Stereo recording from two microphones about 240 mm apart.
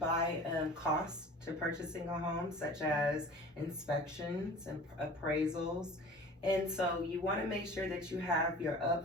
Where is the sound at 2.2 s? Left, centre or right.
Centre.